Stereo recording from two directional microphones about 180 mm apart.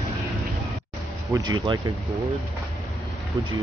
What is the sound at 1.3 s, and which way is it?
Speech, 25° right (ahead or behind).